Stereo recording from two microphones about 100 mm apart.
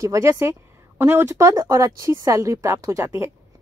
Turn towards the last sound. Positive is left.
turn(degrees=-30)  # may be behind; listen again after turning